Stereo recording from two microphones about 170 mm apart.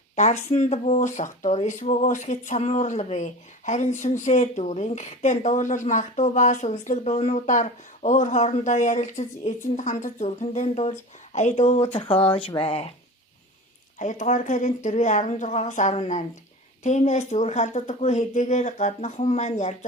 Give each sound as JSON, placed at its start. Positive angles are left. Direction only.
{"t": 0.2, "sound": "a woman's voice", "side_deg": 45}
{"t": 14.0, "sound": "a woman's voice", "side_deg": 45}